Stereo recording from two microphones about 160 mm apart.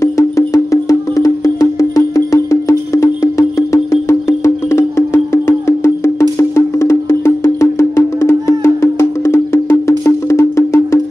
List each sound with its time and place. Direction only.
0.0 s music: 20° left (ahead or behind)